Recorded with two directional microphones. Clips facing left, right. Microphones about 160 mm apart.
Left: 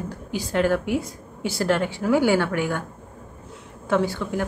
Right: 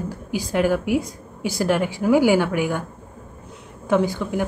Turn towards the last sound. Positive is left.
turn(degrees=-15)  # may be behind; listen again after turning